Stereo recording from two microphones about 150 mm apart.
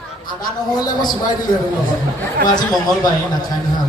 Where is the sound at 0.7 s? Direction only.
25° left (ahead or behind).